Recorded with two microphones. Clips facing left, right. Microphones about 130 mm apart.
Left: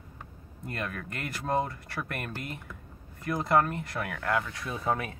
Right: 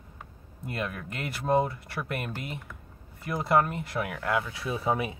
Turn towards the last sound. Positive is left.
turn(degrees=-10)  # may be behind; listen again after turning